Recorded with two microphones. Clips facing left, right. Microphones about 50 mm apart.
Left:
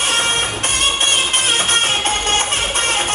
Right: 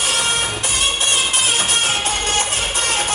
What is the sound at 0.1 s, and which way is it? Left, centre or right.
Music, left.